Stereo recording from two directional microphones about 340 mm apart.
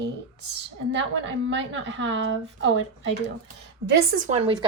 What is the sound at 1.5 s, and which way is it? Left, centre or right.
A woman's voice, right.